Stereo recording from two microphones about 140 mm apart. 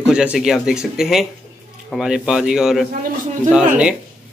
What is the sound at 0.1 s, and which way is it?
Speech, 5° right (ahead or behind).